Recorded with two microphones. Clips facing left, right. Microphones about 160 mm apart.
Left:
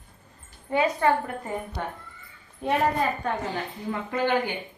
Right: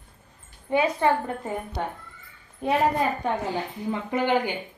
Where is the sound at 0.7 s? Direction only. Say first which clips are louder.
Right 1 dB; 20° right (ahead or behind).